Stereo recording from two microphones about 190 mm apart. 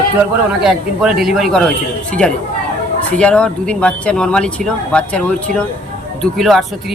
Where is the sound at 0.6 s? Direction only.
Centre (ahead or behind).